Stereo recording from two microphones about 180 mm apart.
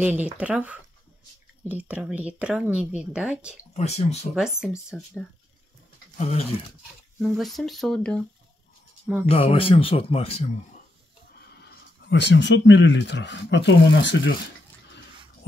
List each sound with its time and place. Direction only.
0.0 s speech: 10° right (ahead or behind)
3.7 s speech: 35° left (ahead or behind)
4.8 s speech: centre (ahead or behind)
7.2 s speech: centre (ahead or behind)
9.0 s speech: 10° right (ahead or behind)
9.3 s speech: 30° left (ahead or behind)
11.6 s speech: 75° left (ahead or behind)